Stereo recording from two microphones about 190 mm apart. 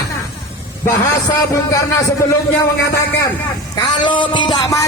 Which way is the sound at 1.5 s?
15° left (ahead or behind).